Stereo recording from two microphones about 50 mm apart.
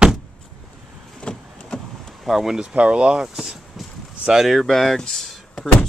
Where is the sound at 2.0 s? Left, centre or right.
Centre.